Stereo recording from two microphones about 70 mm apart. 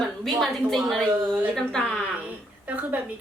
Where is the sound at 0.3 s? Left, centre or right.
Centre.